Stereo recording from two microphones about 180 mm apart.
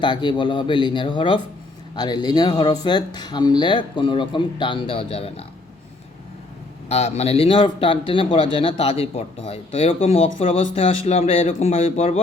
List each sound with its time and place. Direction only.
0.0 s speech: 25° left (ahead or behind)
6.8 s speech: 35° left (ahead or behind)